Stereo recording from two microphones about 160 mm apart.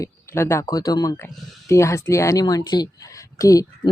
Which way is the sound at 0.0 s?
15° left (ahead or behind).